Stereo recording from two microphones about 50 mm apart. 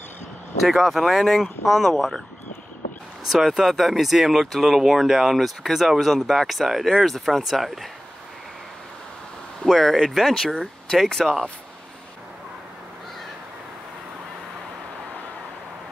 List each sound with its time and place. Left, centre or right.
0.6 s speech: centre
3.3 s speech: centre
9.7 s speech: centre
10.3 s speech: centre